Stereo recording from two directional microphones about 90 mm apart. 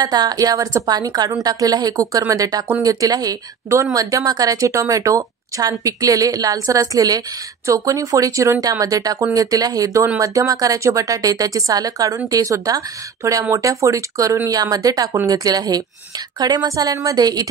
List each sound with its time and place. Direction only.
0.0 s a woman's voice: 45° right (ahead or behind)